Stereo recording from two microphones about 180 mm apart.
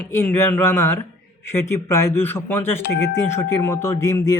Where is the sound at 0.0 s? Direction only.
10° left (ahead or behind).